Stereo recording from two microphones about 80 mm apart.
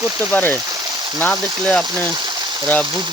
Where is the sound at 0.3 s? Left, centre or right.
Left.